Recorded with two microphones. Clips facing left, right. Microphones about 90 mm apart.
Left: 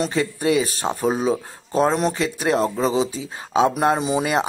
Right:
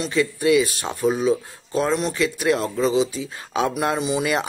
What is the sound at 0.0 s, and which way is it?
Speech, 40° left (ahead or behind).